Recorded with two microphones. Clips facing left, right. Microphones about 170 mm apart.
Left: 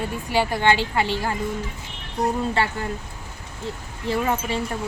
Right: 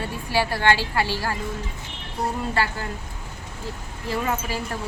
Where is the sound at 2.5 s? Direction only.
25° left (ahead or behind).